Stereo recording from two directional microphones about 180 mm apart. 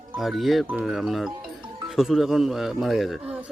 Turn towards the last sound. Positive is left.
turn(degrees=-5)  # may be behind; listen again after turning